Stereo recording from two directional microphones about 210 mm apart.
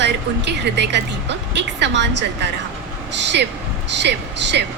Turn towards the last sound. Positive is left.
turn(degrees=-55)  # may be behind; listen again after turning